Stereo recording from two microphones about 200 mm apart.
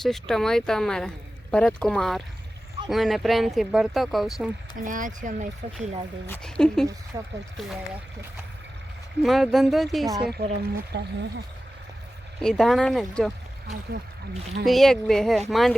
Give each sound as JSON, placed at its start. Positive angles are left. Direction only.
{"t": 0.0, "sound": "speech", "side_deg": 0}
{"t": 4.8, "sound": "speech", "side_deg": -40}
{"t": 6.2, "sound": "speech", "side_deg": 5}
{"t": 7.1, "sound": "speech", "side_deg": -20}
{"t": 9.2, "sound": "speech", "side_deg": 0}
{"t": 10.3, "sound": "speech", "side_deg": -55}
{"t": 12.4, "sound": "speech", "side_deg": 5}
{"t": 14.6, "sound": "speech", "side_deg": 0}